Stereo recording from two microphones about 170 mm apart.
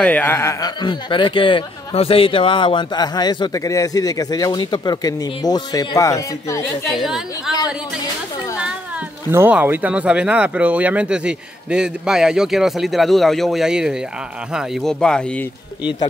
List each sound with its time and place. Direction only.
0.0 s speech: 10° left (ahead or behind)
7.0 s speech: 5° right (ahead or behind)
9.3 s speech: 10° right (ahead or behind); by 15.4 s 5° left (ahead or behind)